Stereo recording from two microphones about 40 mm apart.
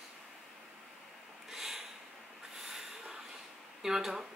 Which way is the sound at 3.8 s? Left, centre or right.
Centre.